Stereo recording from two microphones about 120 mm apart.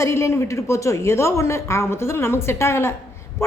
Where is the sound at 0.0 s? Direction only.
25° left (ahead or behind).